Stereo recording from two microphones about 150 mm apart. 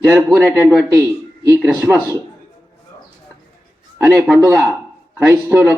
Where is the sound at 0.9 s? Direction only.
20° right (ahead or behind).